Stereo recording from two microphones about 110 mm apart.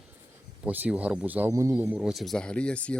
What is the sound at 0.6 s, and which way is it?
Speech, 15° right (ahead or behind).